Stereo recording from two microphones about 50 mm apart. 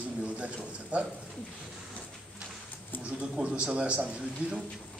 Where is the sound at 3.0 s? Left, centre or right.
Right.